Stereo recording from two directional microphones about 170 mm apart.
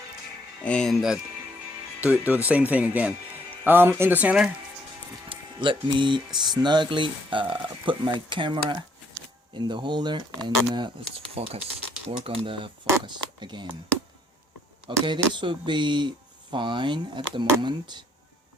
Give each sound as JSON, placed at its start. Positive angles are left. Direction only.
{"t": 0.6, "sound": "speech", "side_deg": 5}
{"t": 5.3, "sound": "speech", "side_deg": -30}
{"t": 15.0, "sound": "speech", "side_deg": -25}